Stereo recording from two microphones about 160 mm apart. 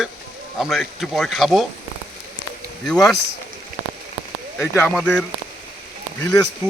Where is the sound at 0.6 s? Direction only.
Centre (ahead or behind).